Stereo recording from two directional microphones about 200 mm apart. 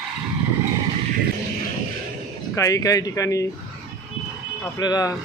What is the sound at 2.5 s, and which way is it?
Speech, 15° left (ahead or behind).